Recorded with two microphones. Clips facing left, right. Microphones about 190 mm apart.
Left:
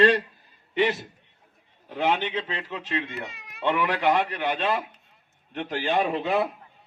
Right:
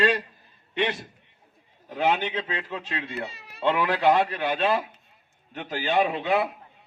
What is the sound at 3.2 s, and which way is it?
Baby cry, 30° right (ahead or behind).